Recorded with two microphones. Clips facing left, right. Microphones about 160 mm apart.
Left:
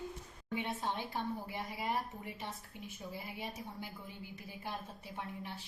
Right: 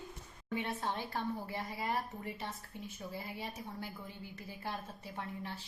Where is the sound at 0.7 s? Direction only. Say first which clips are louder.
Even; 20° left (ahead or behind).